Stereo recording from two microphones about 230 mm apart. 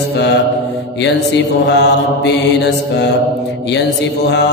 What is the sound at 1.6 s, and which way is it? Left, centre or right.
Mantra, left.